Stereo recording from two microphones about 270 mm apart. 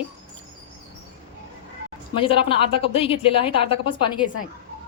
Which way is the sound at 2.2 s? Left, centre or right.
Centre.